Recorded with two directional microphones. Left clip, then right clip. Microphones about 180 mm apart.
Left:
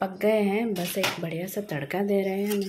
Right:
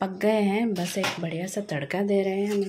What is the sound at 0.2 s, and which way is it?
Speech, 15° right (ahead or behind).